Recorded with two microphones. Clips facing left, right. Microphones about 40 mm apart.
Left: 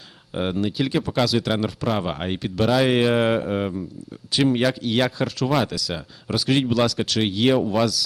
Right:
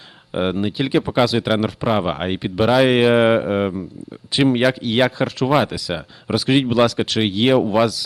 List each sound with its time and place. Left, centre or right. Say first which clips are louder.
0.6 s speech: right 4 dB; right